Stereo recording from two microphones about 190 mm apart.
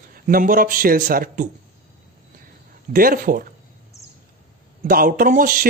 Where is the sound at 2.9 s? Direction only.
50° right (ahead or behind).